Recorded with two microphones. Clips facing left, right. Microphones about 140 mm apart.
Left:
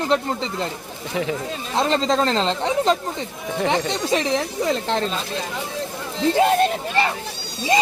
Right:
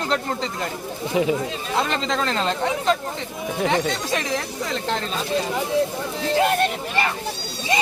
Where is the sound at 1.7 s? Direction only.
35° left (ahead or behind).